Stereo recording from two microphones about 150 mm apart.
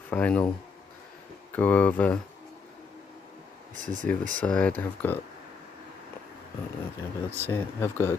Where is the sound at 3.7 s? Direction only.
60° right (ahead or behind).